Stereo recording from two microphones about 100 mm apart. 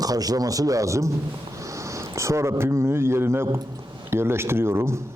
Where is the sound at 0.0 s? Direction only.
40° right (ahead or behind).